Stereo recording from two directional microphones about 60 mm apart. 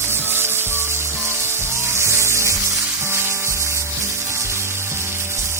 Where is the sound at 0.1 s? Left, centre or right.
Right.